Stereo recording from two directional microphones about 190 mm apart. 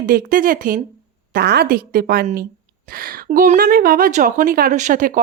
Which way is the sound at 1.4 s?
60° right (ahead or behind).